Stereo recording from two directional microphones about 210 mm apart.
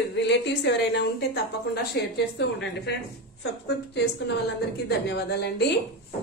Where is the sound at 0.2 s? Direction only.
55° left (ahead or behind).